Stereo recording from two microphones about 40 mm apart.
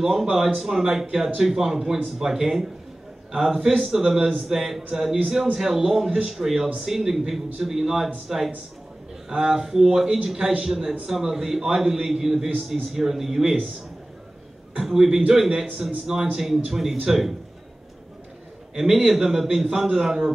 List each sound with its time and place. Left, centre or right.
0.0 s a man's voice: centre
1.8 s a man's voice: right
2.1 s a man's voice: centre
14.8 s a man's voice: centre
15.8 s a man's voice: centre
19.0 s a man's voice: centre